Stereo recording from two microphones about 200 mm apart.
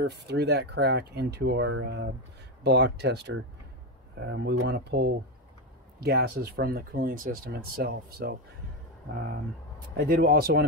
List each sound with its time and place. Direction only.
0.0 s speech: 55° right (ahead or behind)
1.7 s speech: 65° right (ahead or behind)
9.9 s speech: 50° right (ahead or behind)